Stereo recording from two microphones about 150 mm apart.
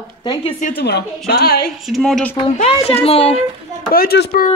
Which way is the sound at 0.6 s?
90° left.